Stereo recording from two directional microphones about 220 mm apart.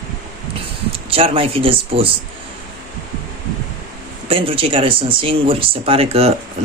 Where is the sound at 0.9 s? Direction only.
25° right (ahead or behind).